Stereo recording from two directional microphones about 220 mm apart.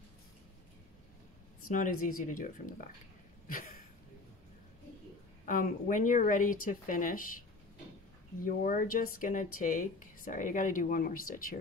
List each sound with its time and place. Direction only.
1.7 s speech: 40° left (ahead or behind)
5.4 s speech: 35° left (ahead or behind)
8.5 s speech: 40° left (ahead or behind)